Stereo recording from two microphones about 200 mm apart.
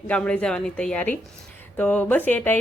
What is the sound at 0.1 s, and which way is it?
Speech, 5° left (ahead or behind).